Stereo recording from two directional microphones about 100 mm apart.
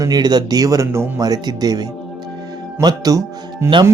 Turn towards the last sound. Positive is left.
turn(degrees=-35)  # may be behind; listen again after turning